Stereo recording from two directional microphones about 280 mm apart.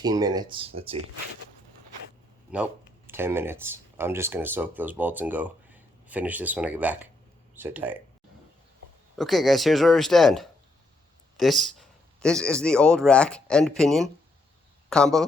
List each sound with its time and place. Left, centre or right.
0.0 s speech: centre
3.1 s speech: centre
9.1 s speech: centre